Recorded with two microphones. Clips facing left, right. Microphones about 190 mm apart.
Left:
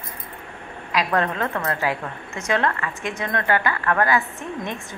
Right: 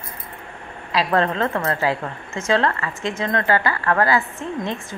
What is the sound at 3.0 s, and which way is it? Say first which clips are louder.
Speech: right 3 dB; 15° left (ahead or behind).